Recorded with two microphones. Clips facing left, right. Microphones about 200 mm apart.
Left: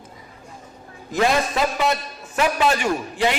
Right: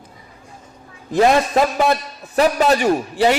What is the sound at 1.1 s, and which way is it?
A man's voice, 45° right (ahead or behind).